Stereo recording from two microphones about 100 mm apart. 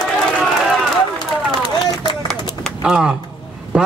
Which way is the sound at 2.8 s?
10° right (ahead or behind).